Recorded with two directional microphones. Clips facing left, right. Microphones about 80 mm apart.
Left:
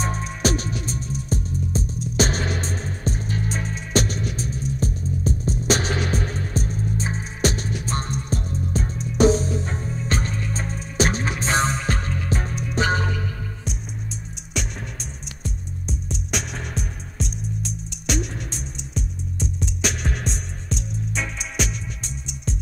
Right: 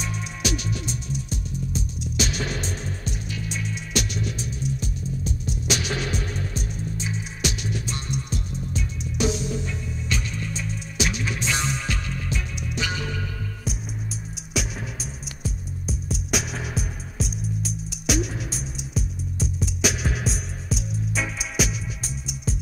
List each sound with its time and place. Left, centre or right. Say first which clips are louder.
0.0 s music: left 6 dB; left
14.5 s music: right 1 dB; centre